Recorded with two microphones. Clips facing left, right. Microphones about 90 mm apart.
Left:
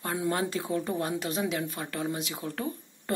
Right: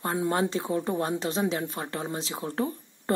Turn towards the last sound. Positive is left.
turn(degrees=-30)  # may be behind; listen again after turning